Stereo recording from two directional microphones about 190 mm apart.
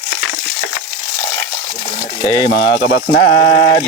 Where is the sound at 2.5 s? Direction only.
60° left (ahead or behind).